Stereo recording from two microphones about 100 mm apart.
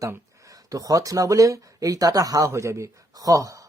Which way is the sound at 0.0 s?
35° right (ahead or behind).